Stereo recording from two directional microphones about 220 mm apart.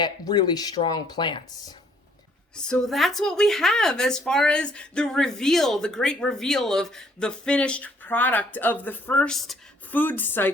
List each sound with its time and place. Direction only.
0.0 s speech: 20° left (ahead or behind)
2.6 s a woman's voice: 5° left (ahead or behind)